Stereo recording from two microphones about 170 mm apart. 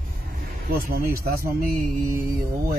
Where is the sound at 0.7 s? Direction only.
60° right (ahead or behind).